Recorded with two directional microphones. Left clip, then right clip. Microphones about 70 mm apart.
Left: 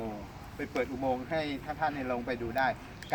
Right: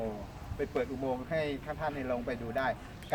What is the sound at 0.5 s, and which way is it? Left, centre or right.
Speech, centre.